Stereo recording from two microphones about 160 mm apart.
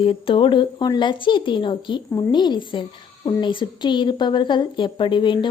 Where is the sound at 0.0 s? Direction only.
35° left (ahead or behind).